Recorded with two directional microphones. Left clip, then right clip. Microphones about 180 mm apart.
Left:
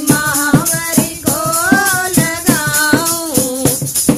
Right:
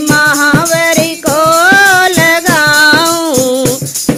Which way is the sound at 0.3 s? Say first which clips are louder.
Right 6 dB; 25° right (ahead or behind).